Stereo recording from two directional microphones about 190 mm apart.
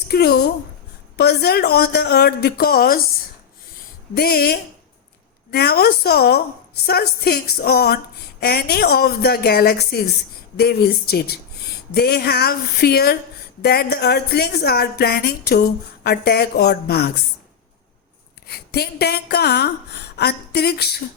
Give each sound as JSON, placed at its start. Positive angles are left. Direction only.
{"t": 0.1, "sound": "speech", "side_deg": 55}
{"t": 4.1, "sound": "speech", "side_deg": 55}
{"t": 18.4, "sound": "a woman's voice", "side_deg": 60}